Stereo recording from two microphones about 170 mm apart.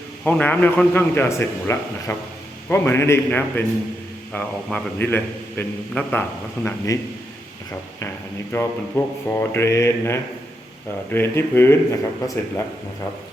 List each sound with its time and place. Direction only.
0.3 s a man's voice: 10° left (ahead or behind)
8.5 s a man's voice: 15° left (ahead or behind)